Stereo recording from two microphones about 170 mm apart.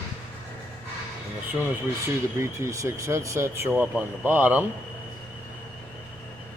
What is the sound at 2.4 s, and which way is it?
Speech, 15° right (ahead or behind).